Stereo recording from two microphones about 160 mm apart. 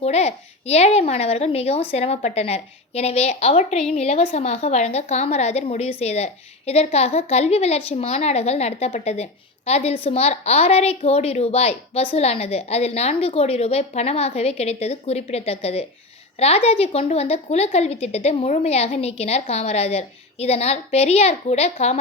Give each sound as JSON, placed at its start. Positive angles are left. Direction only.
{"t": 0.0, "sound": "a child's voice", "side_deg": 40}